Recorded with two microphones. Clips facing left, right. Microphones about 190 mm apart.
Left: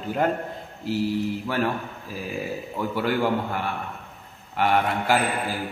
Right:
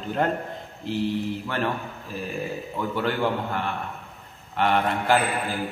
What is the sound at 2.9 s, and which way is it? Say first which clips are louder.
A man's voice: left 2 dB; 10° left (ahead or behind).